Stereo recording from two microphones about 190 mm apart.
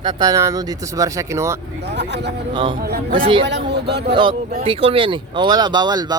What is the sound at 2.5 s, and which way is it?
Speech, 25° right (ahead or behind).